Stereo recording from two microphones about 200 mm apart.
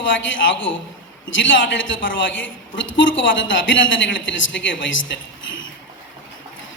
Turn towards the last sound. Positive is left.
turn(degrees=70)  # may be behind; listen again after turning